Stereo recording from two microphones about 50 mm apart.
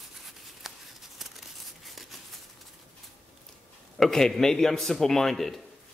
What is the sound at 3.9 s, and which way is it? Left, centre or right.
A man's voice, centre.